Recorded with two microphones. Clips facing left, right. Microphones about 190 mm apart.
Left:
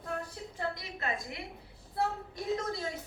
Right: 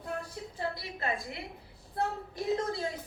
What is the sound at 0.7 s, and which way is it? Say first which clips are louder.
A woman's voice: right 2 dB; 30° right (ahead or behind).